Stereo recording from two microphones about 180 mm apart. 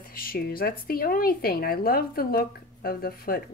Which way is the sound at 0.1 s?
55° left (ahead or behind).